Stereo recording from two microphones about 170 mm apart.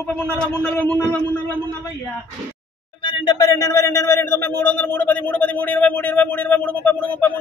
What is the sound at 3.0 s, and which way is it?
Speech, 30° left (ahead or behind).